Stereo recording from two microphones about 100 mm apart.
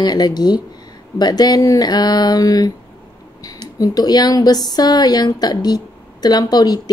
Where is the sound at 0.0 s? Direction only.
45° left (ahead or behind).